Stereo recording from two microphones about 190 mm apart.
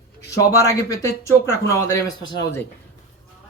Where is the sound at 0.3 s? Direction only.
15° left (ahead or behind).